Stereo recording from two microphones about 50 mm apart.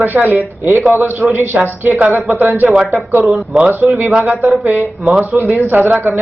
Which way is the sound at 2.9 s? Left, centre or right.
Right.